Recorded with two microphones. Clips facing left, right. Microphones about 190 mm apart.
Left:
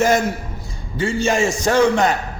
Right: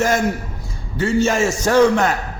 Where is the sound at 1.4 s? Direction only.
15° left (ahead or behind).